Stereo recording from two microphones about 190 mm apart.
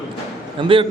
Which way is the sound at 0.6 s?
30° right (ahead or behind).